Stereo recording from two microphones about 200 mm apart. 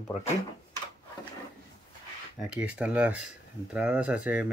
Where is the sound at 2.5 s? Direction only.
5° right (ahead or behind).